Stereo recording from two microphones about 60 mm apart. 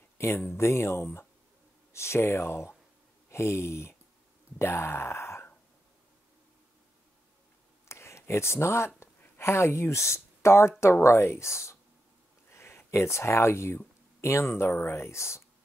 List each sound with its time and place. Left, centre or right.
0.5 s speech: left
4.6 s a sound: left
7.9 s a sound: left
9.4 s speech: left
14.7 s speech: left
15.0 s speech: left